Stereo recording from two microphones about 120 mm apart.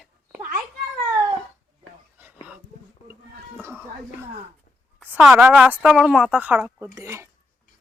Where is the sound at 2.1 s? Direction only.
15° right (ahead or behind).